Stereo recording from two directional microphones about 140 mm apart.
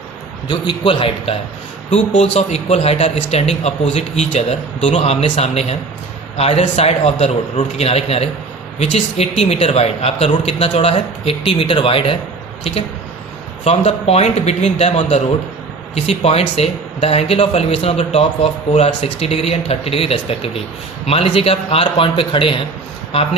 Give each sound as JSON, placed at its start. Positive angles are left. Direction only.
{"t": 0.4, "sound": "a man's voice", "side_deg": 35}
{"t": 13.7, "sound": "a man's voice", "side_deg": 50}